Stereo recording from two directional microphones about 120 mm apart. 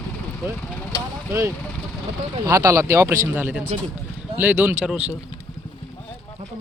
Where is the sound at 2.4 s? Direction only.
25° right (ahead or behind); by 5.1 s 5° right (ahead or behind).